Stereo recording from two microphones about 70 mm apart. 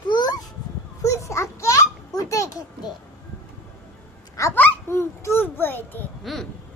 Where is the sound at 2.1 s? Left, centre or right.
Left.